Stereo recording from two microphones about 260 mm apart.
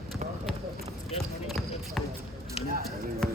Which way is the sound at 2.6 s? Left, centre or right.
Left.